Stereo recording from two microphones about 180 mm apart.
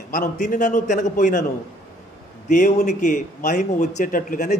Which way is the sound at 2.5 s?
40° left (ahead or behind).